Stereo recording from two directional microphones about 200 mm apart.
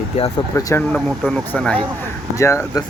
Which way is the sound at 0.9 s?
Centre (ahead or behind).